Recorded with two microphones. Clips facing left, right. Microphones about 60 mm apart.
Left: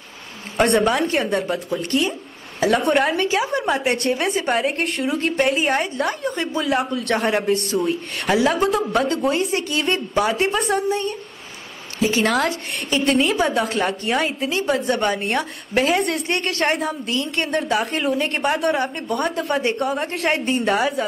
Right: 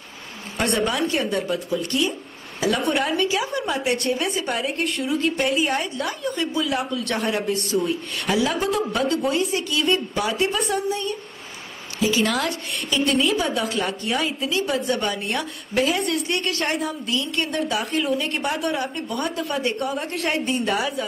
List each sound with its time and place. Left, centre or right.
0.6 s a woman's voice: left
12.1 s a woman's voice: left
12.4 s a woman's voice: left
14.5 s a woman's voice: left
16.6 s a woman's voice: left
19.6 s a woman's voice: left